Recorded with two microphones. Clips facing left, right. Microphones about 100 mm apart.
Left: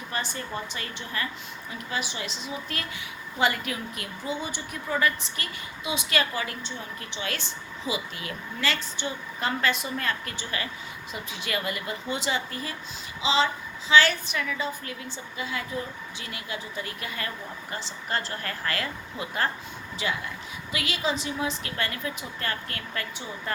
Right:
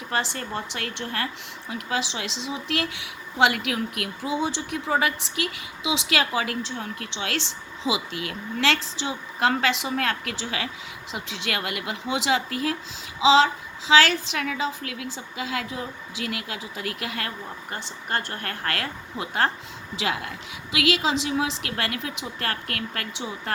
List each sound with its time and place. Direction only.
0.1 s a woman's voice: 90° right; by 1.3 s 70° right (ahead or behind)
1.7 s a woman's voice: 90° right
6.7 s a woman's voice: 70° right (ahead or behind); by 8.0 s 90° right
8.1 s a woman's voice: 30° left (ahead or behind)
8.6 s a woman's voice: 90° right
11.1 s a woman's voice: 80° right
17.7 s speech: 55° right (ahead or behind)
20.0 s a woman's voice: 90° right